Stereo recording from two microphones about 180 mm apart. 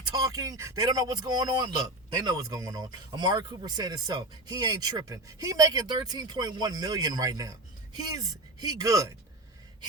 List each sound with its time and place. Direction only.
0.1 s speech: 20° right (ahead or behind)
8.6 s speech: 20° right (ahead or behind)